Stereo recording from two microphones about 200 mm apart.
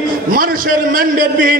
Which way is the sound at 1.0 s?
45° right (ahead or behind).